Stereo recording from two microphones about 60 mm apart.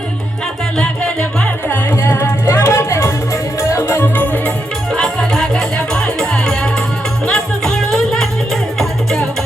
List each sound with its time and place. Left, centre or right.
0.8 s music: centre
1.6 s music: left
4.1 s music: left
4.9 s music: centre